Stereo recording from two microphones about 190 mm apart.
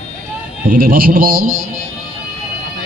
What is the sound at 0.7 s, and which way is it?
Speech, 50° right (ahead or behind).